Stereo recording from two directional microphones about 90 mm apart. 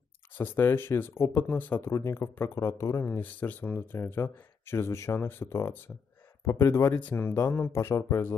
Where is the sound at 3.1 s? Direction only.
20° left (ahead or behind).